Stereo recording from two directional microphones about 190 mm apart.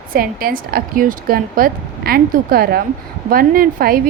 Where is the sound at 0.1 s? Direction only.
50° right (ahead or behind).